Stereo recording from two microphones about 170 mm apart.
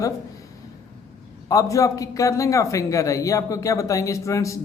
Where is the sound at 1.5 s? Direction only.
20° left (ahead or behind).